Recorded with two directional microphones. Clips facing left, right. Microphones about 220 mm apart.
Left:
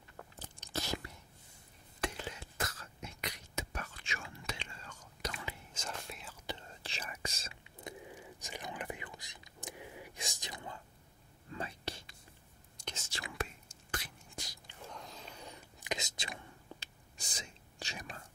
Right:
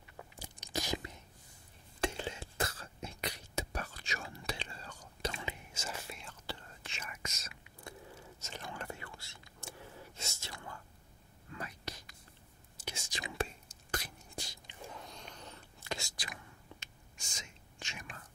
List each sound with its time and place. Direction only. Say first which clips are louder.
0.2 s biting: right 1 dB; 10° right (ahead or behind)
2.0 s a sound: right 3 dB; 25° right (ahead or behind)
5.7 s whispering: right 1 dB; 5° right (ahead or behind)
6.4 s whispering: left 2 dB; 20° left (ahead or behind)
6.8 s whispering: left 3 dB; 35° left (ahead or behind)
7.8 s whispering: left 3 dB; 15° left (ahead or behind)
12.7 s whispering: right 1 dB; 10° right (ahead or behind)
13.4 s whispering: right 4 dB; 40° right (ahead or behind)
14.9 s whispering: left 1 dB; centre (ahead or behind); by 18.2 s 35° left (ahead or behind)